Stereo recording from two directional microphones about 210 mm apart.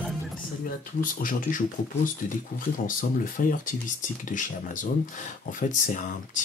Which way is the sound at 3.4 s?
40° left (ahead or behind).